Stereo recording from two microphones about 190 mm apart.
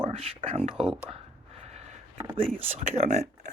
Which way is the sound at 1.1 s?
35° right (ahead or behind).